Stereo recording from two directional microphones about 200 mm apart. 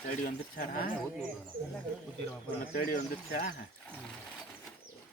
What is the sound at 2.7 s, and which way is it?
Speech, 55° left (ahead or behind).